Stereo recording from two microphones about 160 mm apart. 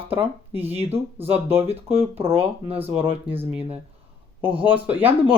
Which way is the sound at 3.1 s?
35° right (ahead or behind).